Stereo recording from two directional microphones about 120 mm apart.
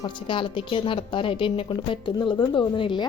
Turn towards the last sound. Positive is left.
turn(degrees=45)  # may be behind; listen again after turning